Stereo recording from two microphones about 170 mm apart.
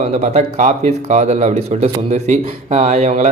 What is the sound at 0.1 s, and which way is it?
Speech, 40° right (ahead or behind).